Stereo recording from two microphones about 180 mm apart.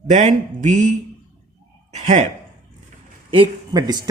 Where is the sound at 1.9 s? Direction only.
40° right (ahead or behind).